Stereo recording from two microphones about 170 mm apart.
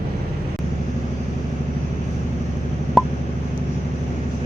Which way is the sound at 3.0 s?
Centre (ahead or behind).